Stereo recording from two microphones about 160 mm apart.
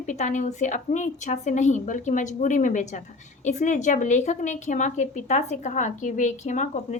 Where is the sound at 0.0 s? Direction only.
50° left (ahead or behind).